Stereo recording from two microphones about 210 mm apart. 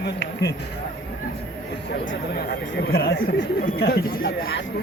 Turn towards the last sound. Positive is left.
turn(degrees=45)  # may be behind; listen again after turning